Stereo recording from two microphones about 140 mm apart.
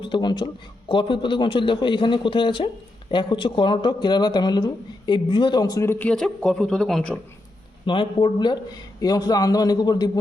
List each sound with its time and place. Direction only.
0.0 s a man's voice: 35° left (ahead or behind); by 7.2 s 5° left (ahead or behind)
7.9 s speech: 35° left (ahead or behind)